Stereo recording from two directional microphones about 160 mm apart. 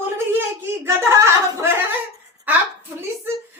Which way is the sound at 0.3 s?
15° right (ahead or behind).